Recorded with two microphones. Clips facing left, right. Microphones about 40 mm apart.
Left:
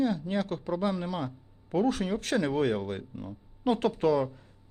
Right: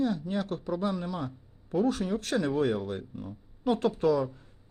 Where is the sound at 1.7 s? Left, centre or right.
Left.